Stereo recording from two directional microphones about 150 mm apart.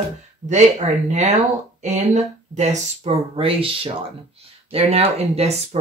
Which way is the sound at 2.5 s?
50° right (ahead or behind).